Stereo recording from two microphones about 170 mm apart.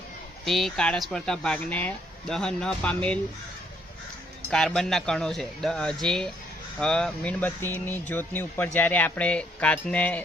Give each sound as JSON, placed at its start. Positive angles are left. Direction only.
{"t": 0.4, "sound": "speech", "side_deg": 0}
{"t": 4.5, "sound": "speech", "side_deg": 5}